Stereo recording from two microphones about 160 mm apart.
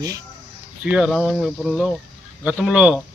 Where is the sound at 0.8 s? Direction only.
5° right (ahead or behind).